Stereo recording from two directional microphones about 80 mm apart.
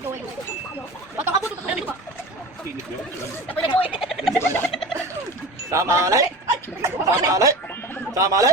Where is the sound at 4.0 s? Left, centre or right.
Centre.